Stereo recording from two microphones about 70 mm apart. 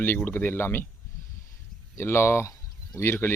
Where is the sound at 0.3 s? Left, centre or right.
Left.